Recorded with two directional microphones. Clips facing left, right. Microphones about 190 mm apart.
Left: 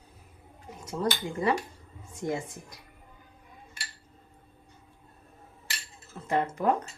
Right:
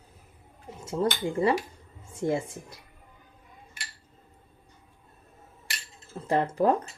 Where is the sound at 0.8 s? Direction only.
25° right (ahead or behind).